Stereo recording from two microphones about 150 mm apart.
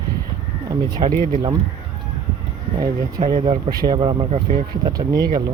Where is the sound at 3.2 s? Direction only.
45° right (ahead or behind).